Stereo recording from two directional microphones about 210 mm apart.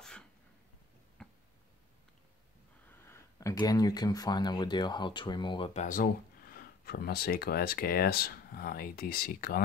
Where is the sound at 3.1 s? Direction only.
15° left (ahead or behind).